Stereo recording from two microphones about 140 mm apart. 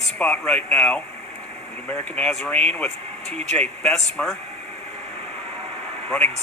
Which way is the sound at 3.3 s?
50° right (ahead or behind).